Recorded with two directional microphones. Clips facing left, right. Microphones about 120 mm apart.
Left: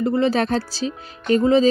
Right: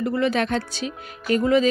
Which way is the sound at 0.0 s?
30° left (ahead or behind).